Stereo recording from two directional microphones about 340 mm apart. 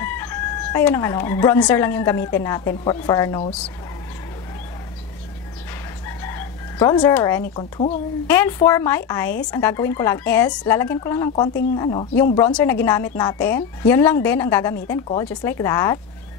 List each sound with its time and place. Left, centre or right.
0.0 s speech: centre
6.0 s chicken: centre
7.5 s speech: centre